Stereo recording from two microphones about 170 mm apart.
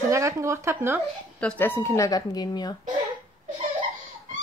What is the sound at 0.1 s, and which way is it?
Speech, 15° right (ahead or behind).